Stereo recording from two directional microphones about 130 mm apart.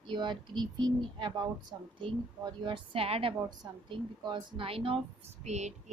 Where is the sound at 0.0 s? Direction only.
35° right (ahead or behind).